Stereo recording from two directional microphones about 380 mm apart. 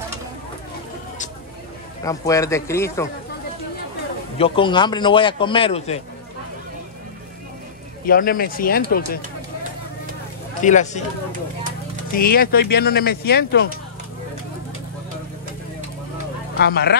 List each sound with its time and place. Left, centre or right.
2.0 s a man's voice: centre
4.4 s a man's voice: centre
8.0 s speech: left
10.6 s speech: centre
12.1 s speech: left
16.5 s speech: left